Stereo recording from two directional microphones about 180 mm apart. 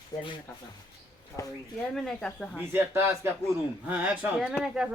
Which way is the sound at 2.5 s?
10° right (ahead or behind).